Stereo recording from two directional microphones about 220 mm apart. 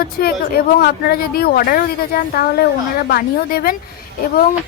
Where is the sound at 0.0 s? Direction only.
45° left (ahead or behind).